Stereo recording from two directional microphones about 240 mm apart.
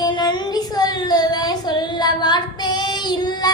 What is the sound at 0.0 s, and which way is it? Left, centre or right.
Child singing, centre.